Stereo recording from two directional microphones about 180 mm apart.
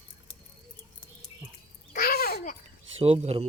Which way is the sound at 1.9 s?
55° left (ahead or behind).